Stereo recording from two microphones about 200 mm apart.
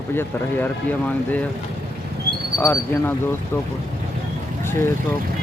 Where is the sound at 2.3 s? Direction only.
55° right (ahead or behind).